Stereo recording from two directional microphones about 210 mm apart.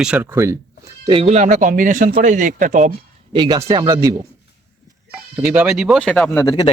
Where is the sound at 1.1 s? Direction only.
30° right (ahead or behind).